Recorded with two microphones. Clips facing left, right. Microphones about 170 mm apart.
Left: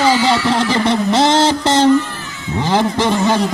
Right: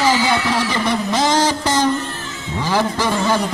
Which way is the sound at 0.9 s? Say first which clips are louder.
Left 4 dB; 25° left (ahead or behind).